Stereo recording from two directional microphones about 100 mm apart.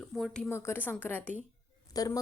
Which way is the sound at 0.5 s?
25° left (ahead or behind).